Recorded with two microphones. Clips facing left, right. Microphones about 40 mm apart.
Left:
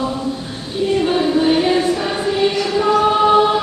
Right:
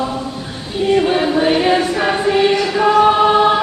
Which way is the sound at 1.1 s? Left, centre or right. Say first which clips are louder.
Right 1 dB; right.